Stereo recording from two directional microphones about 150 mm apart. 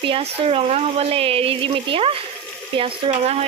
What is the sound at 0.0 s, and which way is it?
Speech, 35° right (ahead or behind).